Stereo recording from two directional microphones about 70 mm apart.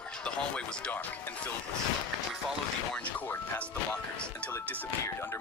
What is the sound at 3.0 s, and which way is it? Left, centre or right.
Speech, left.